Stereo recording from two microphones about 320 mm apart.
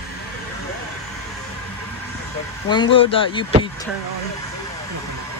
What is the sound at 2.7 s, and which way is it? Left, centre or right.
Speech, centre.